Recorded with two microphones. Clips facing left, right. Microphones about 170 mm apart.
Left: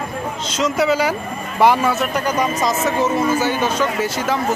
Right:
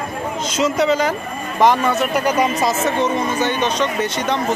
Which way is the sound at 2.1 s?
10° right (ahead or behind).